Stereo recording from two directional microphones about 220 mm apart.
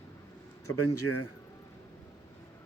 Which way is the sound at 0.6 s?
90° left.